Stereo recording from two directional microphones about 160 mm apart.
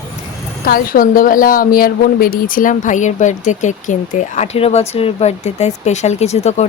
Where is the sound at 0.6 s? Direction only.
65° left (ahead or behind).